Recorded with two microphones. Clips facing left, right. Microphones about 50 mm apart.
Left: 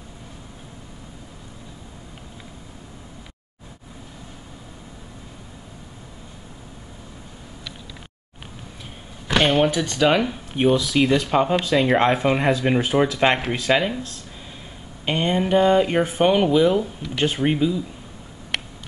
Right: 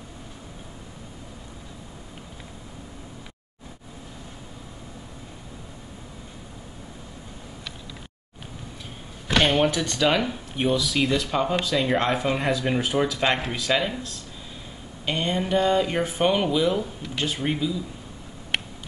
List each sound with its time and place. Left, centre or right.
9.4 s speech: centre
10.5 s speech: left
15.0 s speech: left
17.2 s speech: left